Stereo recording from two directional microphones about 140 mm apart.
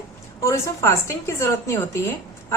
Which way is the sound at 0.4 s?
20° left (ahead or behind).